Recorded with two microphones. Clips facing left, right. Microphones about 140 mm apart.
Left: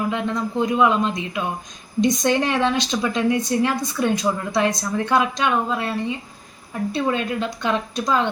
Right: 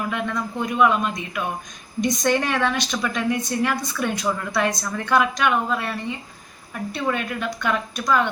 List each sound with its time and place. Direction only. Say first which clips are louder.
0.0 s a woman's voice: left 3 dB; 20° left (ahead or behind)